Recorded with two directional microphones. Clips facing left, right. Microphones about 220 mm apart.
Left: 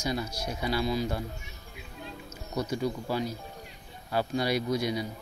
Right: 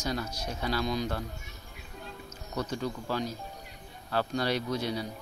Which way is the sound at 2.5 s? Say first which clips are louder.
Left 3 dB; 10° left (ahead or behind).